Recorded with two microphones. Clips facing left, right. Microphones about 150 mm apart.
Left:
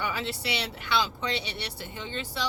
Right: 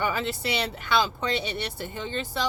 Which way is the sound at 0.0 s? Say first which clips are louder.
Right 4 dB; 45° right (ahead or behind).